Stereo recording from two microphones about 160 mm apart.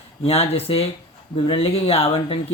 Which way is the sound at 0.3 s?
40° left (ahead or behind).